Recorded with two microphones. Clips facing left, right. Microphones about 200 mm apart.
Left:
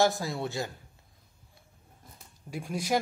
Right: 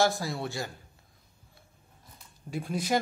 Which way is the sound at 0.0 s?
20° left (ahead or behind).